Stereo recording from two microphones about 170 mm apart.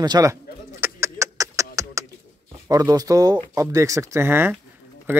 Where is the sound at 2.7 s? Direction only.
20° right (ahead or behind).